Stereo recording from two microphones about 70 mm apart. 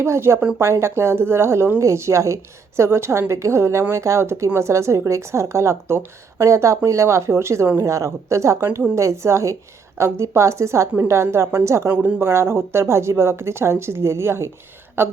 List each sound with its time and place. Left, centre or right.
0.0 s a woman's voice: right